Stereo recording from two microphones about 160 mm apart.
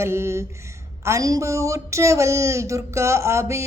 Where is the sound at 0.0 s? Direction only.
15° right (ahead or behind).